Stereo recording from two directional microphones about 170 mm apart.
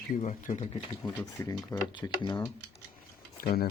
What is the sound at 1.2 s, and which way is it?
Speech, 20° left (ahead or behind).